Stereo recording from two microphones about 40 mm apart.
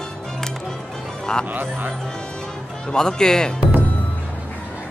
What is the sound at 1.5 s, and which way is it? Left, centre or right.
Speech, right.